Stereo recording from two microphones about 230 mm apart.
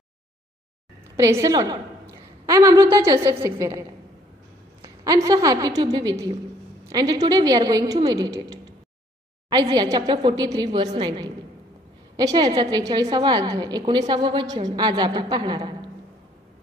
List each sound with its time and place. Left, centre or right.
1.1 s a woman's voice: centre
4.8 s a woman's voice: centre
9.5 s a woman's voice: centre